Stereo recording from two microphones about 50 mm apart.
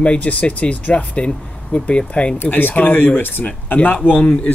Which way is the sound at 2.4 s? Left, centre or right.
Left.